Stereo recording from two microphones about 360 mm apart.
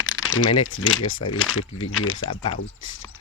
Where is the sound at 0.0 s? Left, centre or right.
Left.